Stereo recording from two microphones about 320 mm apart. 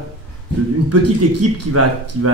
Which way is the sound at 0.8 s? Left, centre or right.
Right.